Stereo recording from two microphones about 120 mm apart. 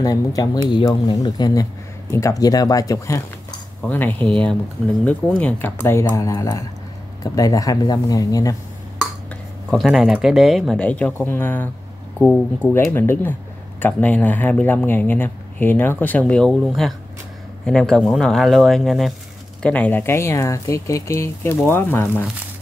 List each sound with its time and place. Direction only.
0.0 s speech: 30° left (ahead or behind)
3.8 s speech: 15° left (ahead or behind); by 8.5 s 30° left (ahead or behind)
9.7 s speech: centre (ahead or behind)
10.8 s speech: 10° left (ahead or behind)
12.9 s speech: 20° left (ahead or behind); by 19.1 s centre (ahead or behind)
19.6 s speech: 10° left (ahead or behind)